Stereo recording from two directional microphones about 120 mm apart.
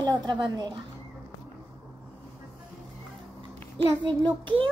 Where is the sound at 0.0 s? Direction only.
35° right (ahead or behind).